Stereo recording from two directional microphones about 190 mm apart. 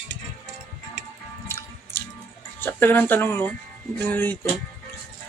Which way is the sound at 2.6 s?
10° left (ahead or behind).